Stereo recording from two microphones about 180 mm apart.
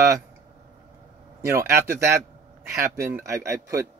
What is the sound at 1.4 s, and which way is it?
Speech, 15° right (ahead or behind).